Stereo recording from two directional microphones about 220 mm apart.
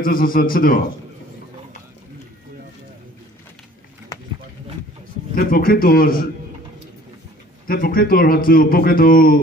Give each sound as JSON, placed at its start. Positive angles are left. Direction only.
{"t": 0.0, "sound": "a man's voice", "side_deg": 40}
{"t": 5.3, "sound": "a man's voice", "side_deg": 40}
{"t": 7.6, "sound": "a man's voice", "side_deg": 40}